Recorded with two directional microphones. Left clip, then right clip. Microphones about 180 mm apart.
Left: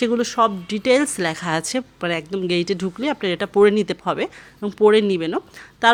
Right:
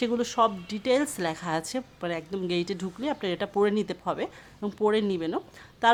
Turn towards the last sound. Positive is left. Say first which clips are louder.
# left 6 dB
turn(degrees=15)  # may be behind; listen again after turning